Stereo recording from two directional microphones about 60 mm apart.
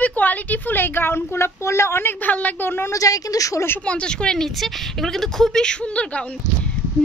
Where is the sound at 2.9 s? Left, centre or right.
Left.